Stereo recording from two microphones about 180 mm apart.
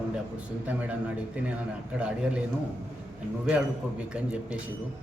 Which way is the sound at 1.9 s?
5° right (ahead or behind).